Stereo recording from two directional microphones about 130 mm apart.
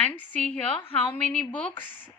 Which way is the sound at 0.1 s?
10° left (ahead or behind).